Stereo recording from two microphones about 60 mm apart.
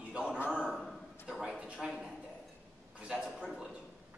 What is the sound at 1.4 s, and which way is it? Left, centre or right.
Speech, centre.